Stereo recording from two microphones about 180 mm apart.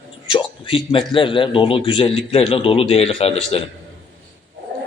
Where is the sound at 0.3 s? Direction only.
30° left (ahead or behind).